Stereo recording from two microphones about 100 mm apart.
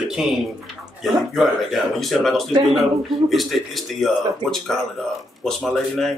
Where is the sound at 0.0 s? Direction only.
5° right (ahead or behind).